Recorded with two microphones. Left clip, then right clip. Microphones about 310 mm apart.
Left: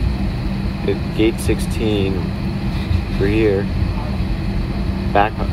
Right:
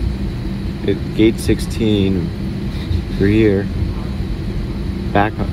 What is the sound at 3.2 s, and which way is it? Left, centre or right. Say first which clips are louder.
Speech: right 2 dB; right.